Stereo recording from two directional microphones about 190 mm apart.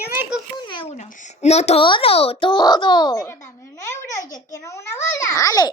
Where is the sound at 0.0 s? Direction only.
10° right (ahead or behind).